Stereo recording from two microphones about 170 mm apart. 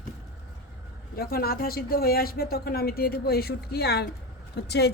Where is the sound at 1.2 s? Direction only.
65° left (ahead or behind).